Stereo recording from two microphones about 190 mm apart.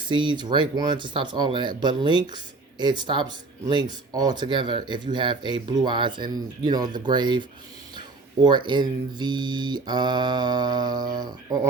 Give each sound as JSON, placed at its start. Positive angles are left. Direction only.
{"t": 0.0, "sound": "speech", "side_deg": -25}